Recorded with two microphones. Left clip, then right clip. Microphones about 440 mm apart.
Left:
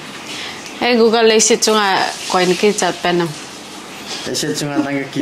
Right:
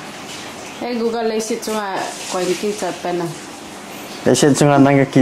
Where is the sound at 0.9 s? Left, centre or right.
Left.